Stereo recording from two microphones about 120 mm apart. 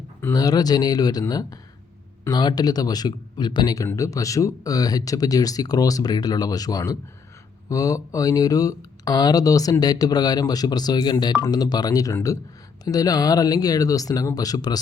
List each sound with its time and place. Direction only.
0.3 s speech: 35° left (ahead or behind)